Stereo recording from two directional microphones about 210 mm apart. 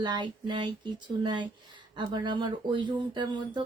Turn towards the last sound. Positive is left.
turn(degrees=-20)  # may be behind; listen again after turning